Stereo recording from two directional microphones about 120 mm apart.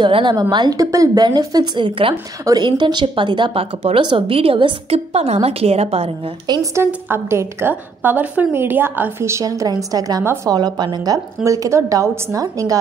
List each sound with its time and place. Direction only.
0.0 s a woman's voice: 40° right (ahead or behind)
4.9 s a woman's voice: 60° right (ahead or behind)
6.4 s a woman's voice: 30° right (ahead or behind)
10.5 s a woman's voice: 35° right (ahead or behind)